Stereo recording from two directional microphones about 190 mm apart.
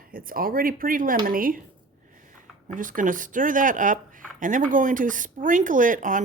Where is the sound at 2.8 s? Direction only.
45° right (ahead or behind).